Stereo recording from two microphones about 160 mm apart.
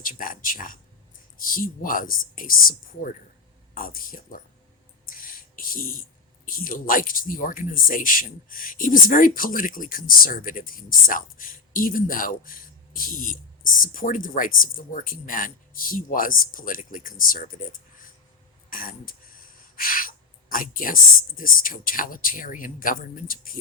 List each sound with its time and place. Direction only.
0.0 s speech: 60° left (ahead or behind)
5.0 s a sound: 60° left (ahead or behind)
6.4 s speech: 60° left (ahead or behind)